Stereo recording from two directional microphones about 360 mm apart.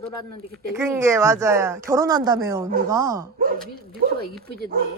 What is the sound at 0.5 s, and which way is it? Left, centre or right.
Speech, centre.